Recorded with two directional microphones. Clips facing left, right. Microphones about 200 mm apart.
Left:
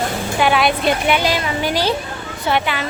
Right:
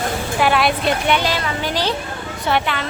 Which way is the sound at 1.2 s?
15° left (ahead or behind).